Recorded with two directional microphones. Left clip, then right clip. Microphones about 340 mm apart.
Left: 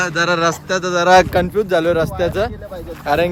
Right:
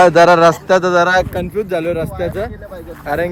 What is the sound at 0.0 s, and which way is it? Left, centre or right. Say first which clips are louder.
Speech: right 9 dB; centre.